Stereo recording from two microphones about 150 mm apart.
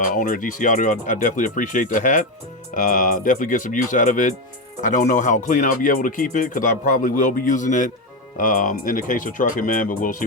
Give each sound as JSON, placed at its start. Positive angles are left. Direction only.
{"t": 0.0, "sound": "speech", "side_deg": 65}